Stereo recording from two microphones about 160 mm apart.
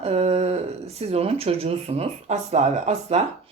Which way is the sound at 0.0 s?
40° right (ahead or behind).